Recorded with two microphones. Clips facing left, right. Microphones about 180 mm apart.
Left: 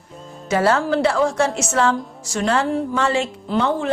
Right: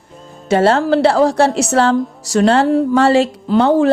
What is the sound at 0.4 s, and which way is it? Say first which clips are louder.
A woman's voice: right 5 dB; 30° right (ahead or behind).